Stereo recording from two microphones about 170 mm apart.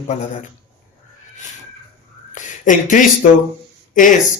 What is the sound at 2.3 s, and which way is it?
Speech, 45° left (ahead or behind).